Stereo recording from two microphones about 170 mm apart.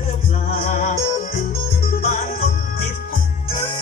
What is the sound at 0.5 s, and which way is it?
Music, 40° left (ahead or behind).